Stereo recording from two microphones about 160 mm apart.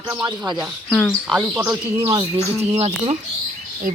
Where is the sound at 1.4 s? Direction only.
10° right (ahead or behind).